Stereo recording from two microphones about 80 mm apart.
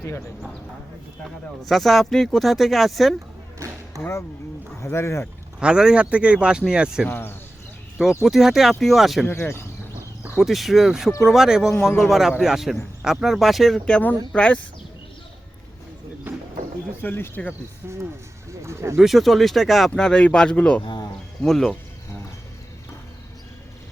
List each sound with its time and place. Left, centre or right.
1.6 s speech: centre
3.9 s speech: right
4.8 s speech: left
5.5 s speech: centre
7.1 s speech: left
8.2 s speech: centre
9.2 s speech: left
10.3 s speech: centre
16.3 s a sound: right
17.0 s speech: left
17.8 s speech: right
18.9 s speech: centre
19.9 s speech: centre